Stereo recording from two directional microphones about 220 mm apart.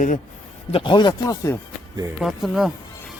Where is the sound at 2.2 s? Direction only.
Centre (ahead or behind).